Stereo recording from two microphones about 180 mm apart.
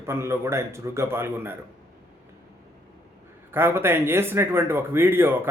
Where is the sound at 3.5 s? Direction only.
15° right (ahead or behind).